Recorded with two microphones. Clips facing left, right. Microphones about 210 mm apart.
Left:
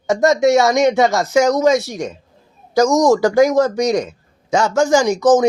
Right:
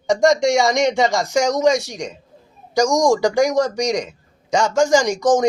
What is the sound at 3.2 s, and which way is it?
Speech, 5° left (ahead or behind).